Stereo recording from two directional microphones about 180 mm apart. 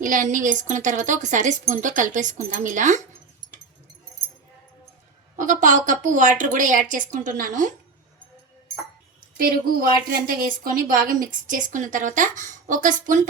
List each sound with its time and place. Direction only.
0.0 s a woman's voice: 45° right (ahead or behind)
5.4 s a woman's voice: 45° right (ahead or behind)
9.4 s a woman's voice: 55° right (ahead or behind)